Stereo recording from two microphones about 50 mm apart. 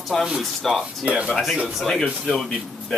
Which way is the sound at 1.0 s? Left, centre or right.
Right.